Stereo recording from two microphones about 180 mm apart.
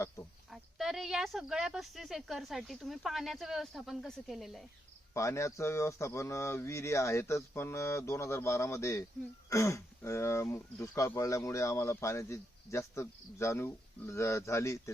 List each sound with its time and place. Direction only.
0.5 s speech: centre (ahead or behind)
5.1 s speech: 15° left (ahead or behind)